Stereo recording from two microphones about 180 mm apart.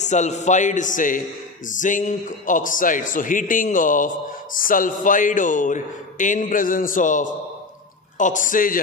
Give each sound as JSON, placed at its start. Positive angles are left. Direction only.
{"t": 0.0, "sound": "speech", "side_deg": 40}